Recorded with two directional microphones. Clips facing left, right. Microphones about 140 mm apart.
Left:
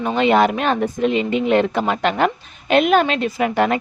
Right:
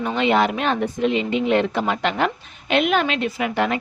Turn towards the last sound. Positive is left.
turn(degrees=45)  # may be behind; listen again after turning